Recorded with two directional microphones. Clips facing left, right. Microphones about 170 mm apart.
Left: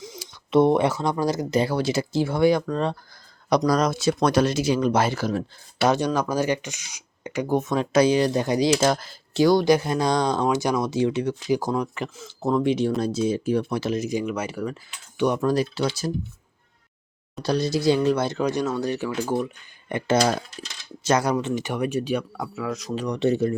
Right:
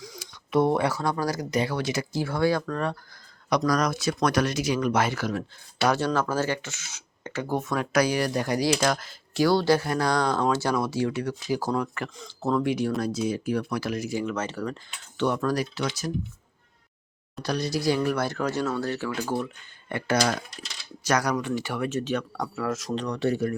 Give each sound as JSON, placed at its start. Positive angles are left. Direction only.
{"t": 0.0, "sound": "speech", "side_deg": 25}
{"t": 9.4, "sound": "speech", "side_deg": 15}
{"t": 17.4, "sound": "speech", "side_deg": 25}
{"t": 23.0, "sound": "speech", "side_deg": 20}